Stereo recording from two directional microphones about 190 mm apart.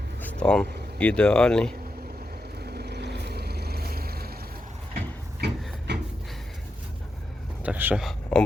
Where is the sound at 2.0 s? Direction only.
55° right (ahead or behind).